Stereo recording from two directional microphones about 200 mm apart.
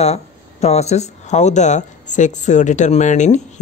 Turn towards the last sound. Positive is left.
turn(degrees=35)  # may be behind; listen again after turning